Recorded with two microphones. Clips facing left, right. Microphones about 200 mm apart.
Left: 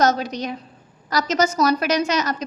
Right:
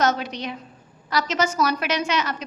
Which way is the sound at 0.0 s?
40° left (ahead or behind).